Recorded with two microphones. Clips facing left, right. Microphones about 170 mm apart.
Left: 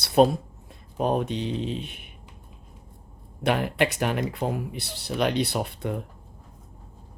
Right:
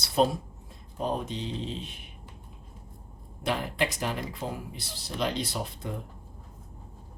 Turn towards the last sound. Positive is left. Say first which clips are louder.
# left 7 dB
turn(degrees=65)  # may be behind; listen again after turning